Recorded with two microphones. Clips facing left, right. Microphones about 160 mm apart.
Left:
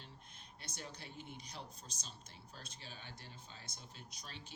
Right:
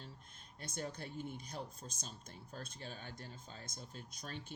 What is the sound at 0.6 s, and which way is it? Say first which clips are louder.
A woman's voice: right 7 dB; 50° right (ahead or behind).